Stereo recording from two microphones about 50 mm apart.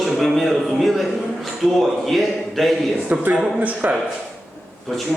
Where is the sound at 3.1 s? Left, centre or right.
Right.